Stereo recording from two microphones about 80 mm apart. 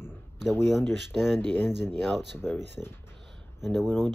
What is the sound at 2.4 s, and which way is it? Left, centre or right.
Speech, left.